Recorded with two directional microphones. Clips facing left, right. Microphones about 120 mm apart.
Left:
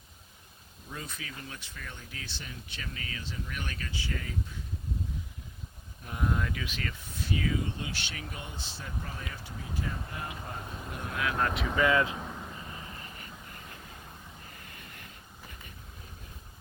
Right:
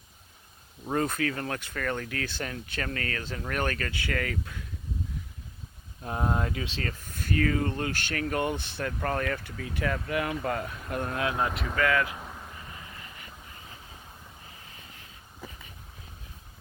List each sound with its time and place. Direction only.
0.9 s speech: 55° right (ahead or behind); by 4.6 s 75° right (ahead or behind)
6.0 s speech: 35° right (ahead or behind); by 11.1 s 60° right (ahead or behind)
11.1 s speech: 30° right (ahead or behind)
11.5 s speech: centre (ahead or behind)
11.8 s speech: 20° left (ahead or behind)
12.1 s vehicle: centre (ahead or behind)
12.7 s vehicle: 30° left (ahead or behind)
14.6 s a sound: 55° left (ahead or behind)